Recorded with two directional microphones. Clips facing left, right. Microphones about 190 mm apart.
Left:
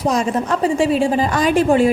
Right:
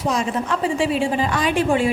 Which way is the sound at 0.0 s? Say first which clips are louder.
Left 4 dB; 40° left (ahead or behind).